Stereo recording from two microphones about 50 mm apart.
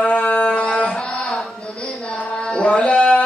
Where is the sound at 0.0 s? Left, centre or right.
Left.